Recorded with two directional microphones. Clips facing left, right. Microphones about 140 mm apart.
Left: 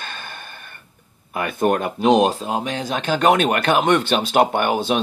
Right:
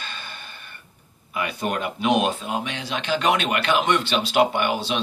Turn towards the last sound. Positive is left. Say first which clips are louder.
# left 4 dB
turn(degrees=50)  # may be behind; listen again after turning